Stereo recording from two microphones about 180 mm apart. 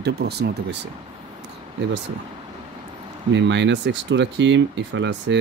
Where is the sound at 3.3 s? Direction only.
85° right.